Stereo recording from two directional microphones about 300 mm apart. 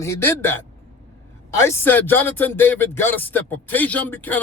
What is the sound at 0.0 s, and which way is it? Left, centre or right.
Speech, centre.